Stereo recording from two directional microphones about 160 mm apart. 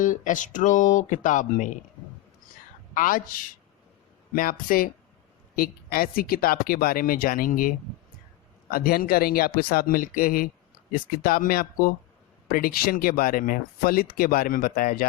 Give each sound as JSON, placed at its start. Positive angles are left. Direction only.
{"t": 0.0, "sound": "speech", "side_deg": 55}
{"t": 2.9, "sound": "speech", "side_deg": 55}
{"t": 8.7, "sound": "speech", "side_deg": 65}